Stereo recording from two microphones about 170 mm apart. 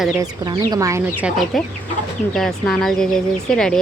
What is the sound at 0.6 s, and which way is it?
Speech, 20° right (ahead or behind).